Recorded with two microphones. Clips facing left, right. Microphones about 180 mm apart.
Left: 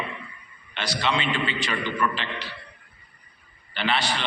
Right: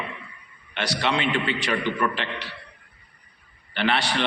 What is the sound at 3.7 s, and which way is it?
Speech, 65° right (ahead or behind).